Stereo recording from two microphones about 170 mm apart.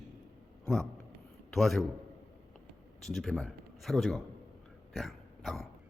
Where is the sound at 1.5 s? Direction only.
Centre (ahead or behind).